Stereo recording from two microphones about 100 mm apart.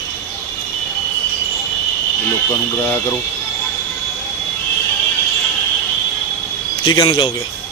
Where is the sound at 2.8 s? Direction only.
25° left (ahead or behind).